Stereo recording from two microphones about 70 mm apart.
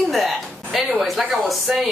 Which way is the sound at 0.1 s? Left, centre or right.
Centre.